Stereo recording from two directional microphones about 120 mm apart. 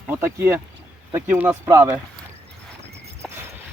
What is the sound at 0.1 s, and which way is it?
Speech, 20° right (ahead or behind).